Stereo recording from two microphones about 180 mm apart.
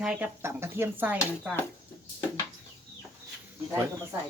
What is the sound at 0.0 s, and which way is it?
Speech, 5° right (ahead or behind).